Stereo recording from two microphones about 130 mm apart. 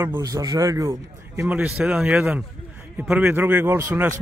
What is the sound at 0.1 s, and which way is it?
Speech, 30° right (ahead or behind).